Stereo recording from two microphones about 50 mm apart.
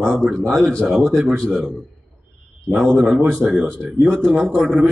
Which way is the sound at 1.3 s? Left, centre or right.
Centre.